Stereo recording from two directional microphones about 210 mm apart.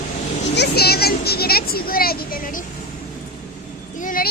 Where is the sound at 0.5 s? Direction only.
50° left (ahead or behind).